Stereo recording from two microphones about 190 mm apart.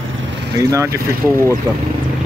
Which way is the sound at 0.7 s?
15° right (ahead or behind).